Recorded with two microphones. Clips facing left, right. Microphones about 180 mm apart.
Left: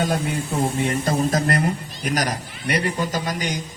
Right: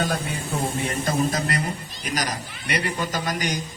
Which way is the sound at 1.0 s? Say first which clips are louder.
Left 1 dB; 45° left (ahead or behind).